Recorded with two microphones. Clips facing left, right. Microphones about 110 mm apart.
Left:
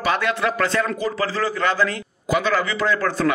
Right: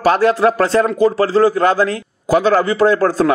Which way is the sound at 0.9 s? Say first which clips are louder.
Right 11 dB; 50° right (ahead or behind).